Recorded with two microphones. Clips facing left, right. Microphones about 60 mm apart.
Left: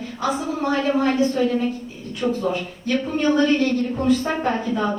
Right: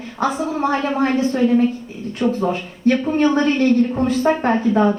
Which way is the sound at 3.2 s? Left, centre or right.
Right.